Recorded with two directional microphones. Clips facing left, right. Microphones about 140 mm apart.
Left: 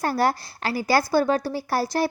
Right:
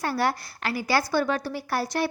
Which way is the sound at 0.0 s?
40° left (ahead or behind).